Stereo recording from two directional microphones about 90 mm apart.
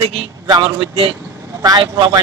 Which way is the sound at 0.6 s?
80° right.